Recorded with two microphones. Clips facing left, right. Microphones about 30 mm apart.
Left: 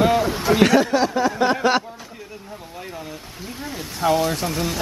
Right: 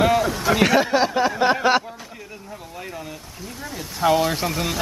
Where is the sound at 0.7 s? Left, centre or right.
Centre.